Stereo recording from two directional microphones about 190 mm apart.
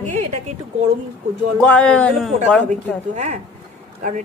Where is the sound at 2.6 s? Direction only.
40° right (ahead or behind).